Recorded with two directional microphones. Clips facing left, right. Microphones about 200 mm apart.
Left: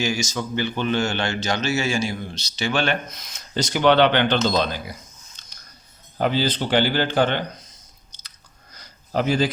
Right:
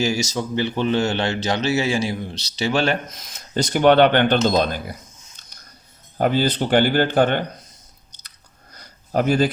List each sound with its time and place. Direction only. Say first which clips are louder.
0.0 s a man's voice: right 3 dB; 35° right (ahead or behind); by 4.9 s 50° right (ahead or behind)
6.1 s a man's voice: right 3 dB; 50° right (ahead or behind)
8.7 s a sound: right 3 dB; 50° right (ahead or behind)